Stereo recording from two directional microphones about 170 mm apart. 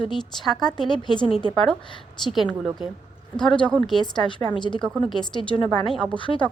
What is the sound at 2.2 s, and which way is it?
Speech, centre (ahead or behind).